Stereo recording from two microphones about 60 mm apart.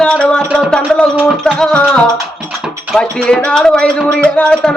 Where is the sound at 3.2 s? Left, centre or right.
Centre.